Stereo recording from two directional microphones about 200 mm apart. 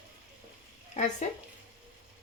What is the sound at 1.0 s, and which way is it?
Speech, 35° left (ahead or behind).